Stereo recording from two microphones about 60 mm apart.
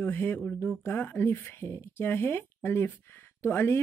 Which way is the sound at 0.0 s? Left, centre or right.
Left.